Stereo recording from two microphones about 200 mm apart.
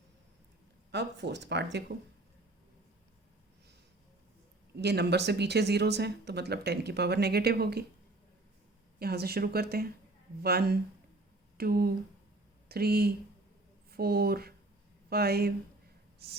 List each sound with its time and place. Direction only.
0.9 s speech: 60° right (ahead or behind)
4.8 s speech: 55° right (ahead or behind)
9.0 s speech: 50° right (ahead or behind)